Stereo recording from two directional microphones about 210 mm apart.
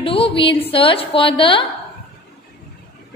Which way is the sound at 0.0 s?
25° left (ahead or behind).